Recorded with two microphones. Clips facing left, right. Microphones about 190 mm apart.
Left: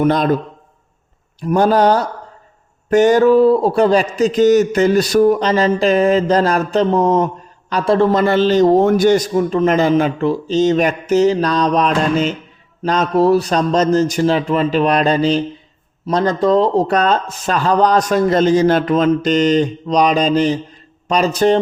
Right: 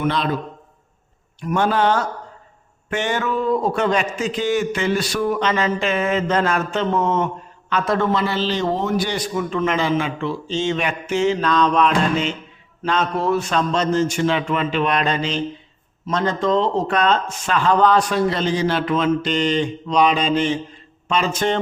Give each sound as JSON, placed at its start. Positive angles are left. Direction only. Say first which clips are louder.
{"t": 0.0, "sound": "a man's voice", "louder": "left 7 dB", "side_deg": 45}
{"t": 1.4, "sound": "speech", "louder": "left 6 dB", "side_deg": 35}
{"t": 8.1, "sound": "speech", "louder": "left 8 dB", "side_deg": 50}